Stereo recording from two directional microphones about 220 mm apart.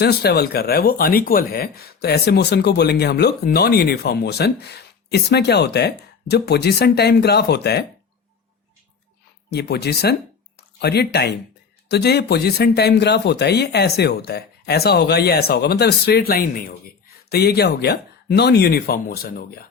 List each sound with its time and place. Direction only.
0.0 s speech: 45° left (ahead or behind)
9.5 s speech: 50° left (ahead or behind)